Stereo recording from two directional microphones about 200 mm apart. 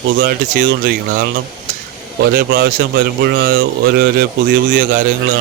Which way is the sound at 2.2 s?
50° right (ahead or behind).